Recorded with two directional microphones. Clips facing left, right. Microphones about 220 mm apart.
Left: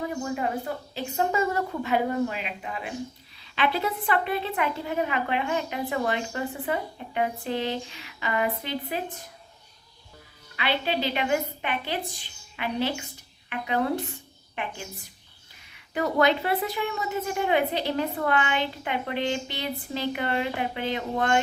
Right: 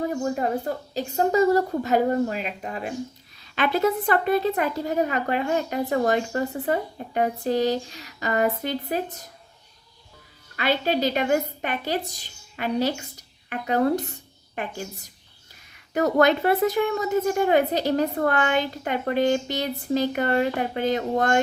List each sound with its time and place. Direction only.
0.1 s a woman's voice: 40° right (ahead or behind)
10.6 s a woman's voice: 45° right (ahead or behind)